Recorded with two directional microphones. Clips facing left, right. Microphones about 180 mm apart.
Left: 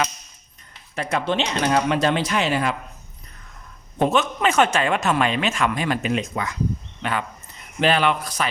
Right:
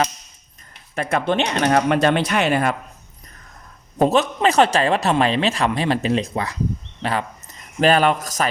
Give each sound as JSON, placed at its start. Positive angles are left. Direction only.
{"t": 0.9, "sound": "speech", "side_deg": -55}
{"t": 3.9, "sound": "a man's voice", "side_deg": -35}